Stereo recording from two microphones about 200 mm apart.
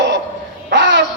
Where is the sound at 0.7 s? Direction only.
60° right (ahead or behind).